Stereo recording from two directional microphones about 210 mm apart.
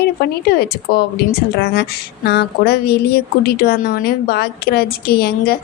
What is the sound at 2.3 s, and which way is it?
A woman's voice, 50° left (ahead or behind).